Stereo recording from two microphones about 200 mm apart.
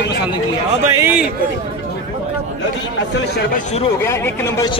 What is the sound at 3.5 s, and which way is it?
Speech, 40° left (ahead or behind).